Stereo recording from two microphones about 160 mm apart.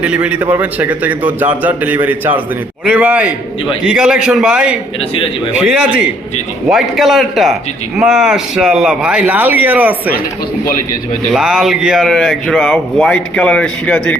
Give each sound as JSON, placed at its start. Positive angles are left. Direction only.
{"t": 0.0, "sound": "a man's voice", "side_deg": -10}
{"t": 4.9, "sound": "speech", "side_deg": 35}
{"t": 5.6, "sound": "a man's voice", "side_deg": -5}
{"t": 11.3, "sound": "speech", "side_deg": -5}